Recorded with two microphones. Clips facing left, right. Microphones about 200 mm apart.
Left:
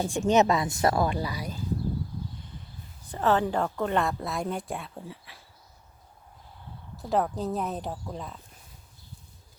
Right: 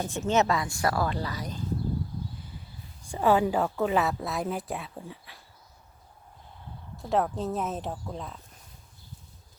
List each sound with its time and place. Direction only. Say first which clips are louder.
0.0 s a woman's voice: left 3 dB; 15° left (ahead or behind)
3.0 s a woman's voice: right 2 dB; 10° right (ahead or behind)
6.9 s a woman's voice: even; centre (ahead or behind)